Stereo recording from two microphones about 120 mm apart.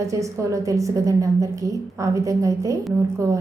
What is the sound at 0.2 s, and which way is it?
A woman's voice, 25° right (ahead or behind).